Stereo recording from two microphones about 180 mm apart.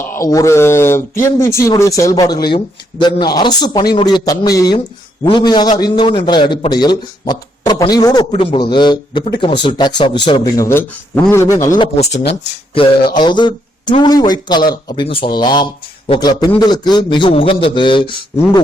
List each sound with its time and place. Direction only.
0.0 s a man's voice: 15° left (ahead or behind)
10.7 s speech: 15° left (ahead or behind)
11.8 s speech: 35° left (ahead or behind)
13.1 s a man's voice: 25° left (ahead or behind)